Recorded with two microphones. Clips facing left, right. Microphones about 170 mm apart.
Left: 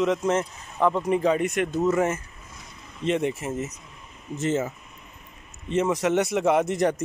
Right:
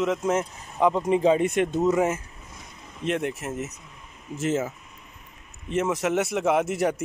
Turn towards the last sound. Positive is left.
turn(degrees=-5)  # may be behind; listen again after turning